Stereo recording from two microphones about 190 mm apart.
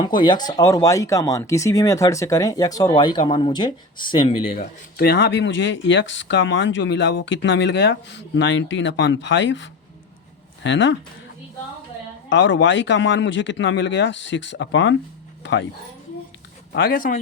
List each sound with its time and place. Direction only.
0.0 s speech: 25° left (ahead or behind)
4.9 s speech: 60° left (ahead or behind); by 10.9 s 75° left (ahead or behind)
12.3 s speech: 75° left (ahead or behind)
16.7 s speech: 50° left (ahead or behind)